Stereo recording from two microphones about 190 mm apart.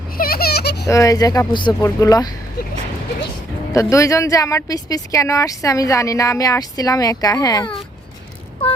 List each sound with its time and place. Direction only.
0.2 s a sound: 50° left (ahead or behind)
0.9 s speech: 15° left (ahead or behind)
3.8 s a woman's voice: 15° left (ahead or behind)